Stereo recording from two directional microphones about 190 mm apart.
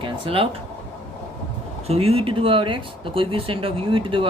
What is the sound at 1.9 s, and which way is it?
Speech, 30° right (ahead or behind).